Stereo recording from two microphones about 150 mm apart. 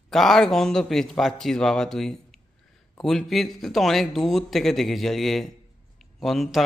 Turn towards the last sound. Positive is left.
turn(degrees=0)  # may be behind; listen again after turning